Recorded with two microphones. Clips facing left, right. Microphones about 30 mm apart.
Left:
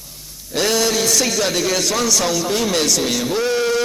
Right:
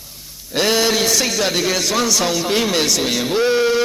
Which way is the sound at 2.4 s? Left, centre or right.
Right.